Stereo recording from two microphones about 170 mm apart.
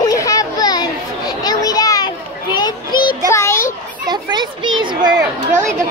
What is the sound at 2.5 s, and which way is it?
Child singing, 25° left (ahead or behind).